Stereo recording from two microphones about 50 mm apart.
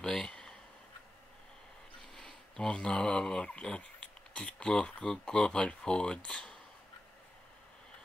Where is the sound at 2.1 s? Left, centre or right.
Centre.